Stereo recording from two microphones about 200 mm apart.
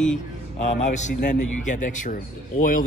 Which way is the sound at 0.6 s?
35° left (ahead or behind).